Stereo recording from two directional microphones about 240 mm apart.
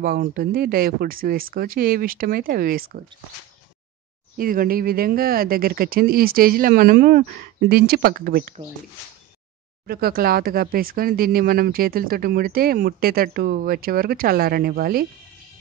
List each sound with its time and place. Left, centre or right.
0.0 s speech: right
4.4 s speech: right
9.8 s speech: right